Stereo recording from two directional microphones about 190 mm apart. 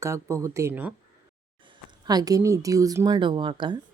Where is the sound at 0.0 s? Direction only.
15° right (ahead or behind).